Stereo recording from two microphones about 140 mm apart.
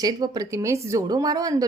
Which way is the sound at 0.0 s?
25° right (ahead or behind).